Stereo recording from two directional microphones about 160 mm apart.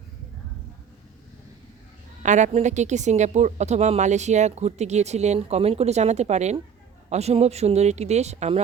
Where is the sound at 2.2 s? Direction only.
50° right (ahead or behind).